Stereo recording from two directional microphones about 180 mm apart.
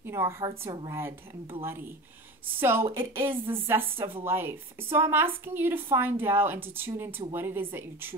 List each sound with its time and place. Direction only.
0.0 s a woman's voice: 15° right (ahead or behind)
0.7 s a woman's voice: 25° right (ahead or behind)
0.9 s a woman's voice: 15° right (ahead or behind)